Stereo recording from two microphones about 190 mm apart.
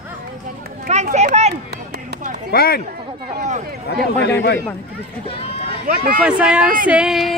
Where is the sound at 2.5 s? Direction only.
55° left (ahead or behind).